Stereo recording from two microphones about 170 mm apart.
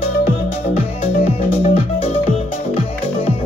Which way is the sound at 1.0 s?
35° left (ahead or behind).